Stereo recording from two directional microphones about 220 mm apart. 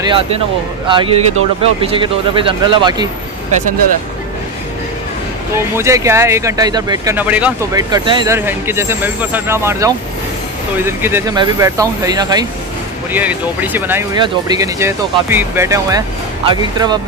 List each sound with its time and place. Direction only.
0.0 s speech: 20° right (ahead or behind)
5.6 s speech: 10° right (ahead or behind)
7.9 s speech: 20° right (ahead or behind)
8.4 s speech: 10° right (ahead or behind)